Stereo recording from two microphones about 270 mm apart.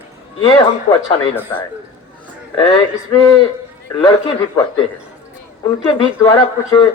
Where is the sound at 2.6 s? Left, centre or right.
Centre.